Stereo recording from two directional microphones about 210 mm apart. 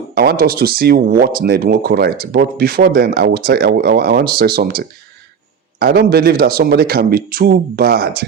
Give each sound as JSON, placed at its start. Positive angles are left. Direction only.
{"t": 0.1, "sound": "speech", "side_deg": -45}